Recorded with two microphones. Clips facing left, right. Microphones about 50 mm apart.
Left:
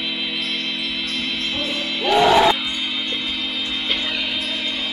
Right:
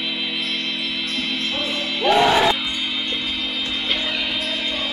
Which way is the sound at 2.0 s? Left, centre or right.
Centre.